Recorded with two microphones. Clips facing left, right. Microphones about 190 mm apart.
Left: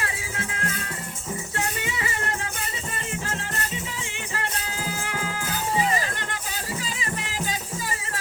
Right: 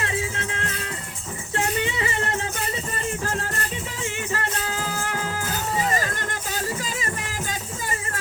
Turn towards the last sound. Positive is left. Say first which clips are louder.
# even
turn(degrees=-45)  # may be behind; listen again after turning